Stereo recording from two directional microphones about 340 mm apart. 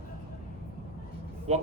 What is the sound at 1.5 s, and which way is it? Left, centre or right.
Speech, centre.